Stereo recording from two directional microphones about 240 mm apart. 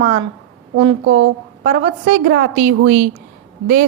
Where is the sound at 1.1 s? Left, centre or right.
Right.